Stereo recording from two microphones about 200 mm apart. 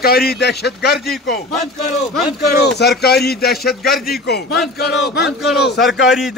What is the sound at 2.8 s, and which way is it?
Speech, 55° left (ahead or behind).